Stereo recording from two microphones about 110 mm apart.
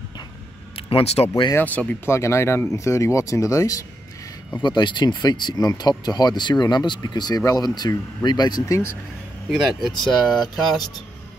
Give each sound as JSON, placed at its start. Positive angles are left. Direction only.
{"t": 0.7, "sound": "speech", "side_deg": 60}
{"t": 1.6, "sound": "speech", "side_deg": 15}
{"t": 4.6, "sound": "speech", "side_deg": 45}
{"t": 9.5, "sound": "speech", "side_deg": 0}